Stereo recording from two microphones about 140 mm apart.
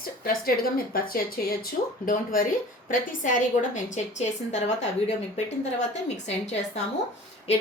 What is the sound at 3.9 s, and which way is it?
A woman's voice, 55° left (ahead or behind).